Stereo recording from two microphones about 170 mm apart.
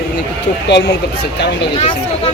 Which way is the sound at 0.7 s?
85° left.